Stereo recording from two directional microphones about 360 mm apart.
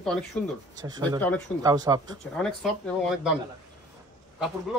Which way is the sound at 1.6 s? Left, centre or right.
Centre.